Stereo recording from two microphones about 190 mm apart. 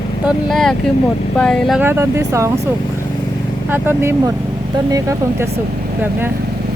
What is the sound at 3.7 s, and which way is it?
Speech, 10° right (ahead or behind).